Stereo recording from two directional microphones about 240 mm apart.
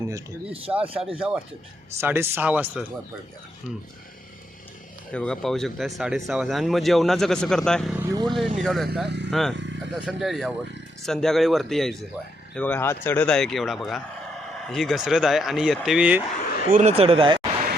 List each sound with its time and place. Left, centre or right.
0.0 s speech: centre
0.8 s speech: right
1.0 s speech: centre
5.1 s speech: centre
8.1 s speech: centre
8.5 s speech: centre
9.0 s speech: right
9.3 s speech: centre
16.5 s a sound: left
16.7 s speech: right